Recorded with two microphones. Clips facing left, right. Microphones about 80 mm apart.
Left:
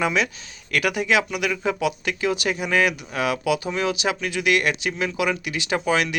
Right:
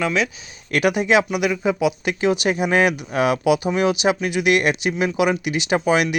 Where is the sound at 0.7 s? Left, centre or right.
Right.